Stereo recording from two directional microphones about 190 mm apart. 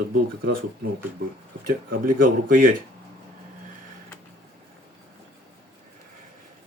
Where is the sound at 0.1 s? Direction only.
50° right (ahead or behind).